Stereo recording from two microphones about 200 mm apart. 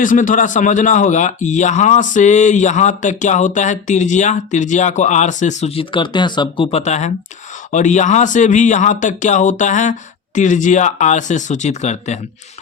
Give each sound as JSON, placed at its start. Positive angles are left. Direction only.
{"t": 0.0, "sound": "a man's voice", "side_deg": 40}